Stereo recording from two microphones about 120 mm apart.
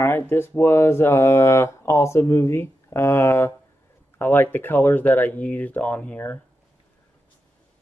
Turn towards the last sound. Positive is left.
turn(degrees=15)  # may be behind; listen again after turning